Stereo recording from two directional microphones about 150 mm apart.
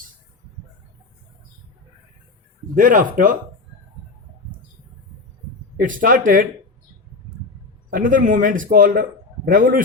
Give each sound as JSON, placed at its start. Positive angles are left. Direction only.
{"t": 2.7, "sound": "speech", "side_deg": -65}
{"t": 5.8, "sound": "speech", "side_deg": -65}
{"t": 7.9, "sound": "speech", "side_deg": -65}